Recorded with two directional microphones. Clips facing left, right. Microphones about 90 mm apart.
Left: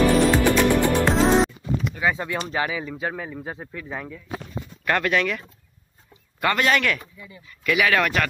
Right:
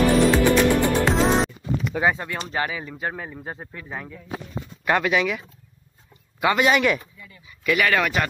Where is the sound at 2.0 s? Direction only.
90° right.